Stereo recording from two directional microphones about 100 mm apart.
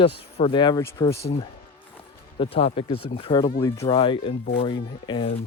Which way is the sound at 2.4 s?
75° left (ahead or behind).